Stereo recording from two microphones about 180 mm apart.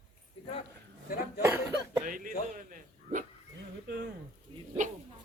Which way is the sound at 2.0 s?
50° right (ahead or behind).